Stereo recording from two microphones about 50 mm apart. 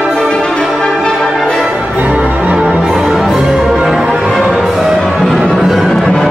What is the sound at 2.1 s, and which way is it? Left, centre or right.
Music, right.